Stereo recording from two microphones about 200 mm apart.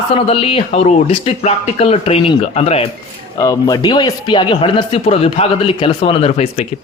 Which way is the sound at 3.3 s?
20° left (ahead or behind).